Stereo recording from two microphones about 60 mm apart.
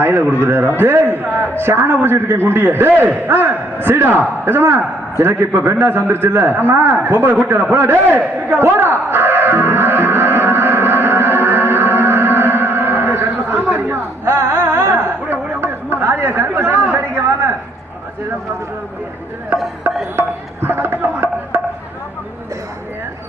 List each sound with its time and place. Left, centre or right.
0.0 s a man's voice: right
3.2 s a sound: right
20.1 s music: right